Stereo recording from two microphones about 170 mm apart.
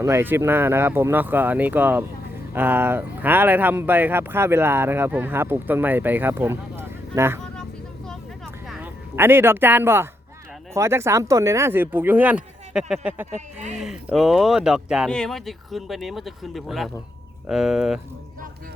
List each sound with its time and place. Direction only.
0.0 s speech: 15° right (ahead or behind)
8.6 s a sound: centre (ahead or behind)
9.1 s speech: 15° right (ahead or behind)
13.3 s speech: 45° right (ahead or behind)
13.7 s speech: 5° right (ahead or behind)